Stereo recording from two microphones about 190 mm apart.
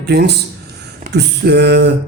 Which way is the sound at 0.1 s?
60° right (ahead or behind).